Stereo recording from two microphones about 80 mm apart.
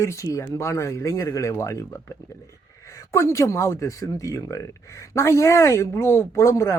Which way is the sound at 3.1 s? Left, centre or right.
Left.